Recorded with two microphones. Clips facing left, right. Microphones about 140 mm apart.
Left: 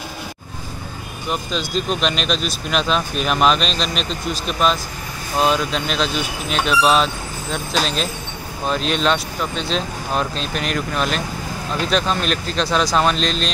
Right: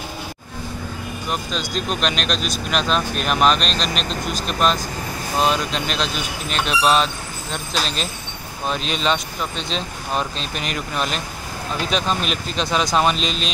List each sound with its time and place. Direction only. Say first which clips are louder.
1.3 s speech: left 3 dB; centre (ahead or behind)